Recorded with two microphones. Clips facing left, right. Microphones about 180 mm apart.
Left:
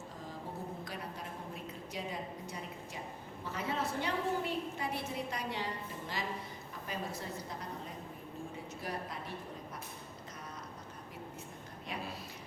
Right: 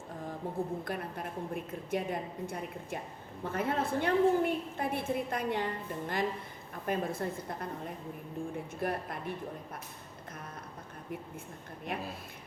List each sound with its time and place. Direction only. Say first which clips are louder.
0.9 s a woman's voice: right 6 dB; 55° right (ahead or behind)
11.9 s a woman's voice: right 4 dB; 55° right (ahead or behind)